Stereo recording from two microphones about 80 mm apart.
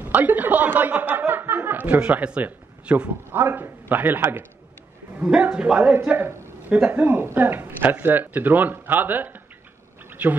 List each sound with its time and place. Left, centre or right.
0.0 s speech: right
3.3 s speech: right
5.2 s a man's voice: centre
6.9 s speech: right
10.0 s a sound: right